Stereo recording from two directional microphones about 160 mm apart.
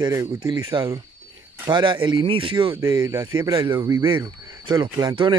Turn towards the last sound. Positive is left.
turn(degrees=-25)  # may be behind; listen again after turning